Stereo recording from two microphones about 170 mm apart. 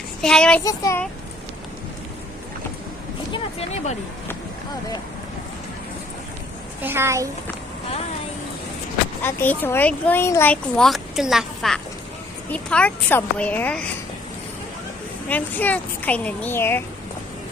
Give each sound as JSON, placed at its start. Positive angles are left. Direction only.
{"t": 0.2, "sound": "child singing", "side_deg": 5}
{"t": 0.7, "sound": "speech", "side_deg": 20}
{"t": 3.5, "sound": "speech", "side_deg": 40}
{"t": 6.8, "sound": "a child's voice", "side_deg": -15}
{"t": 9.2, "sound": "speech", "side_deg": 10}
{"t": 15.2, "sound": "speech", "side_deg": 10}